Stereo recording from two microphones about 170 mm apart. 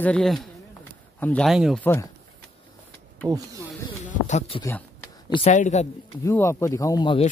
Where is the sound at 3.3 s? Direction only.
20° right (ahead or behind).